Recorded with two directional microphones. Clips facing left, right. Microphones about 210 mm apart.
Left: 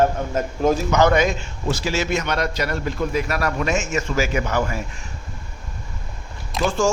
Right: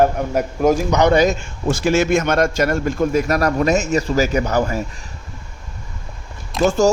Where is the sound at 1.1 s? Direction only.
45° right (ahead or behind).